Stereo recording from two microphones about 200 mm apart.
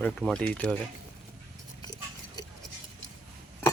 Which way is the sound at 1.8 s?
20° left (ahead or behind).